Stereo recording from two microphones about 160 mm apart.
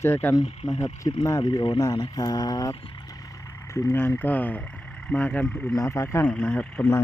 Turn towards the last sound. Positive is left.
turn(degrees=15)  # may be behind; listen again after turning